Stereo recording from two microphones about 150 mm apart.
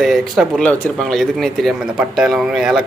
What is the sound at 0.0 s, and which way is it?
Speech, centre (ahead or behind).